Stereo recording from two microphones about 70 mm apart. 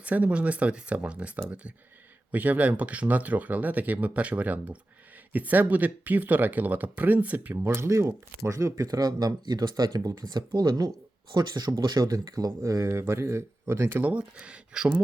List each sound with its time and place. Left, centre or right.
0.0 s speech: right
7.5 s speech: right
12.8 s speech: right
14.0 s speech: centre